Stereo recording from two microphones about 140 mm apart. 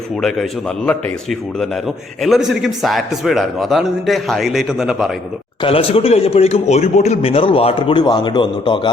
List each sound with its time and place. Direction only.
0.2 s a man's voice: 5° left (ahead or behind)
5.6 s speech: 45° left (ahead or behind)